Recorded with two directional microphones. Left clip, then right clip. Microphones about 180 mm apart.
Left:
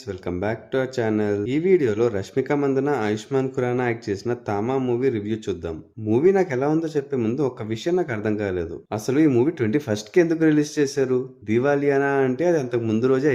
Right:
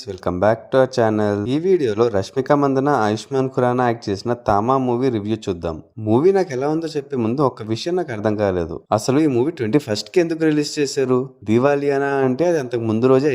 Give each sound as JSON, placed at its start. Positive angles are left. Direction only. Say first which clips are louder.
{"t": 0.3, "sound": "speech", "louder": "right 10 dB", "side_deg": -35}
{"t": 12.8, "sound": "a man's voice", "louder": "right 3 dB", "side_deg": -20}
{"t": 13.1, "sound": "speech", "louder": "right 5 dB", "side_deg": -35}